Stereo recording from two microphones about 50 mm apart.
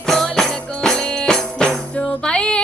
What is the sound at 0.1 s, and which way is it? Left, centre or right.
Music, centre.